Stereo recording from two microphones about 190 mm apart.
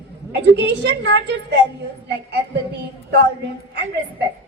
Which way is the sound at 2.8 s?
60° right (ahead or behind).